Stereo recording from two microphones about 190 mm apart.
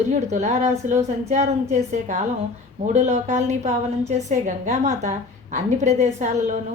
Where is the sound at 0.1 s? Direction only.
40° right (ahead or behind).